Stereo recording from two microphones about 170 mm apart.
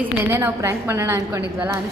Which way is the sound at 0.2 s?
10° right (ahead or behind).